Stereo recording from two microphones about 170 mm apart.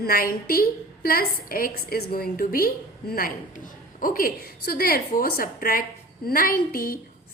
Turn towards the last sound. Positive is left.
turn(degrees=60)  # may be behind; listen again after turning